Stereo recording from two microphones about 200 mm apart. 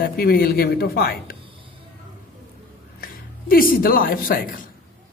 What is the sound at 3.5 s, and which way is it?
Speech, 45° left (ahead or behind).